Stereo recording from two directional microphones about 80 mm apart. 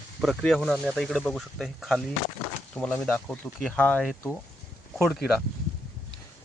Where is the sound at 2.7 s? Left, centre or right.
Centre.